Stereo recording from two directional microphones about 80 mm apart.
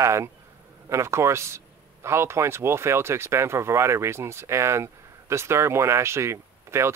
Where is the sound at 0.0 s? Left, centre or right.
Right.